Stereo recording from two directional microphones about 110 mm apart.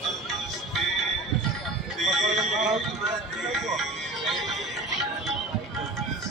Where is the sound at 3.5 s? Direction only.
Centre (ahead or behind).